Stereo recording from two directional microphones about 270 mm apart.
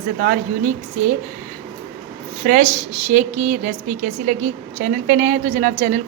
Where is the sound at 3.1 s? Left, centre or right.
Right.